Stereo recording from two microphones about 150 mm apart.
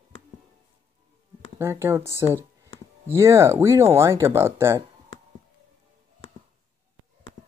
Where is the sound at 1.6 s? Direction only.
15° right (ahead or behind).